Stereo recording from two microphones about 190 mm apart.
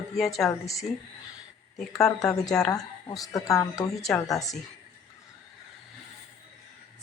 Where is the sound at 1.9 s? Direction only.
Centre (ahead or behind).